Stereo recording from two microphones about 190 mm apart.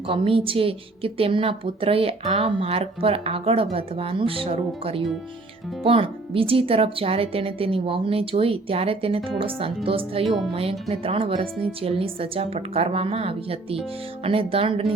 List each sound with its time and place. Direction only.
0.1 s a woman's voice: 30° right (ahead or behind)